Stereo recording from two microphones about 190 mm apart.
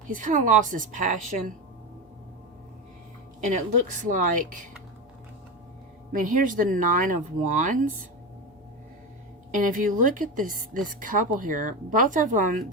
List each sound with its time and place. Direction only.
0.1 s speech: 45° right (ahead or behind)
3.4 s speech: 40° right (ahead or behind)
6.1 s speech: 45° right (ahead or behind)
9.5 s speech: 45° right (ahead or behind)